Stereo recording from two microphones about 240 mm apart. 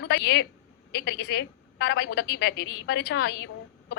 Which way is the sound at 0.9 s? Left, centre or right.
Left.